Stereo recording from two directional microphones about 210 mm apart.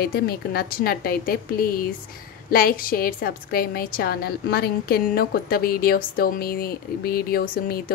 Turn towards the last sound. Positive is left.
turn(degrees=45)  # may be behind; listen again after turning